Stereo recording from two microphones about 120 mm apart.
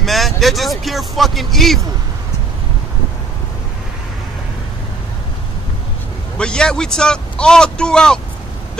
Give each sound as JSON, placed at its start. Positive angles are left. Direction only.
{"t": 0.0, "sound": "speech", "side_deg": 0}
{"t": 6.3, "sound": "a man's voice", "side_deg": 5}